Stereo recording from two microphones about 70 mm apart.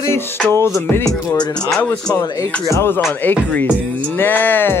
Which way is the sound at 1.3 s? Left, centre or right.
Left.